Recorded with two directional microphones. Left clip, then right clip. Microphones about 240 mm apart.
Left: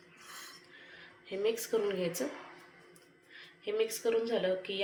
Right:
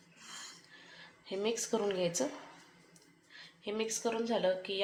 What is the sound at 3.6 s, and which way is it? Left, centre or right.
Speech, right.